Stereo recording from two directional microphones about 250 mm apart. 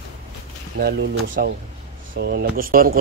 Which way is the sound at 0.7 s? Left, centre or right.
Right.